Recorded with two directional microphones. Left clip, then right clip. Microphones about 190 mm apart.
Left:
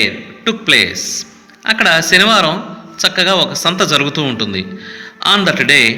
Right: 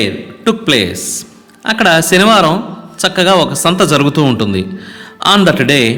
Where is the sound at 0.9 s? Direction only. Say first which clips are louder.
Left 1 dB; 90° right.